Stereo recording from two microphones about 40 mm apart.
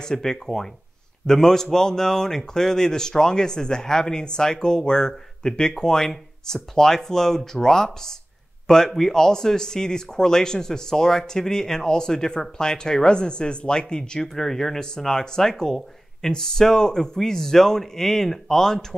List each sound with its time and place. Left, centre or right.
0.0 s speech: centre
14.3 s speech: centre